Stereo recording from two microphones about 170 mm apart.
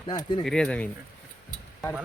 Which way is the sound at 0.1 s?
25° left (ahead or behind).